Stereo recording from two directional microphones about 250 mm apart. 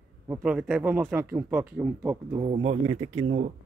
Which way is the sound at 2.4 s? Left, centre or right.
Right.